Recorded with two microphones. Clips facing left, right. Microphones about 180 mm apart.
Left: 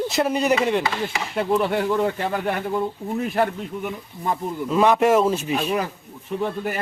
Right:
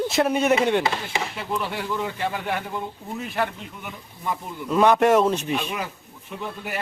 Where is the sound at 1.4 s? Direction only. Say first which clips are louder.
Left 13 dB; 50° left (ahead or behind).